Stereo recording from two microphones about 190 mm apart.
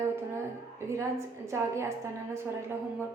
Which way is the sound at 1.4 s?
15° right (ahead or behind).